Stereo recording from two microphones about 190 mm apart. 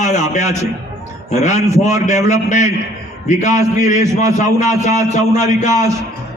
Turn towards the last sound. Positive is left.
turn(degrees=40)  # may be behind; listen again after turning